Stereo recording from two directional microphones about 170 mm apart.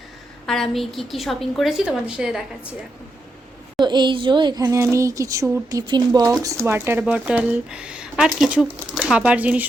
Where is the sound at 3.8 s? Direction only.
25° right (ahead or behind).